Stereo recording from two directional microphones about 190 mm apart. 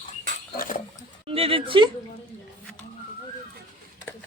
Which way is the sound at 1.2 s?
30° right (ahead or behind).